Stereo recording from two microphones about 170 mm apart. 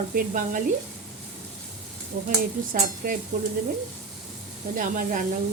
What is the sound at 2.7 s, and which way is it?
Sizzle, 50° right (ahead or behind).